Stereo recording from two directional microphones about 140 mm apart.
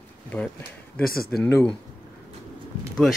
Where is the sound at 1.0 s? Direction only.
90° left.